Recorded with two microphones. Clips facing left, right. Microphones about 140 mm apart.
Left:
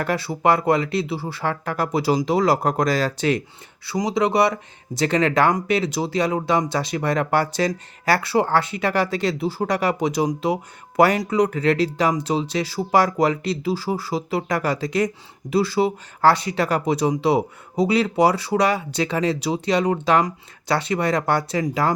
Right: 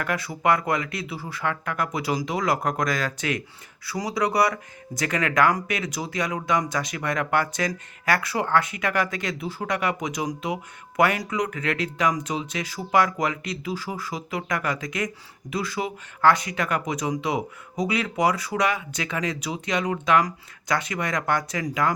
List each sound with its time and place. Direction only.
0.0 s speech: 30° left (ahead or behind)